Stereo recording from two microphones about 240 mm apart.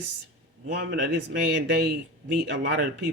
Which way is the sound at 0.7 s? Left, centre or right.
Right.